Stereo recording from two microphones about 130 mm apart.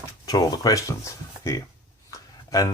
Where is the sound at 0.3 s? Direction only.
30° left (ahead or behind).